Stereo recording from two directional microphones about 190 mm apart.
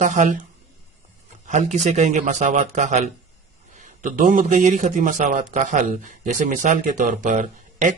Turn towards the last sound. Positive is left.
turn(degrees=-40)  # may be behind; listen again after turning